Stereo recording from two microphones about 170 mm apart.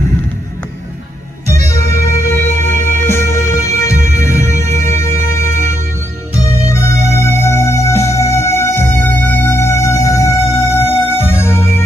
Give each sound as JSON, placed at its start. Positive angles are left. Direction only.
{"t": 1.7, "sound": "music", "side_deg": 15}